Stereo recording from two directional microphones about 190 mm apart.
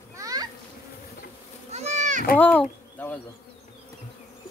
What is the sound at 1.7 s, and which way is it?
Goat, 35° right (ahead or behind).